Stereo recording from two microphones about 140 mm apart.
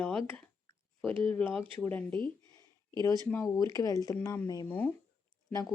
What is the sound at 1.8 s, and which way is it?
Speech, 10° left (ahead or behind).